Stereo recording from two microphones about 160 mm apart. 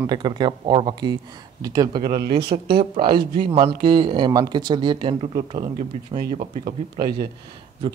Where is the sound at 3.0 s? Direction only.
70° right (ahead or behind).